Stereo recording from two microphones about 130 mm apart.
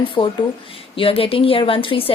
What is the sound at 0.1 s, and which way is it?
A woman's voice, 40° left (ahead or behind).